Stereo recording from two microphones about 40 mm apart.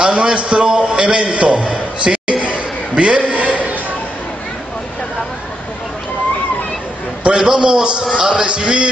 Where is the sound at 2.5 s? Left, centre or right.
Right.